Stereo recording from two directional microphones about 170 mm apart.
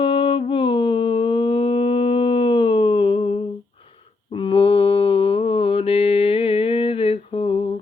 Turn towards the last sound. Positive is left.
turn(degrees=35)  # may be behind; listen again after turning